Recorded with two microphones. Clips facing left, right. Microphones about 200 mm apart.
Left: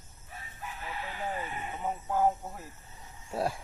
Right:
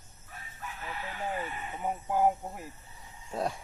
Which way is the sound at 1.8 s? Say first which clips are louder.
Right 1 dB; 15° right (ahead or behind).